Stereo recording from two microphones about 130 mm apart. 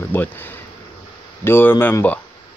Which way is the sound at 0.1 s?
15° left (ahead or behind).